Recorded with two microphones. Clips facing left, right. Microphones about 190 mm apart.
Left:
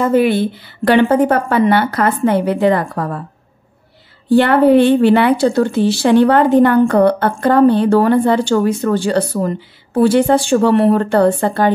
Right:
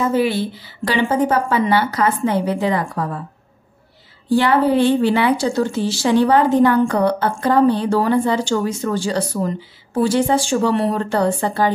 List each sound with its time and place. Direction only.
0.0 s a woman's voice: 55° left (ahead or behind)
4.3 s a woman's voice: 60° left (ahead or behind)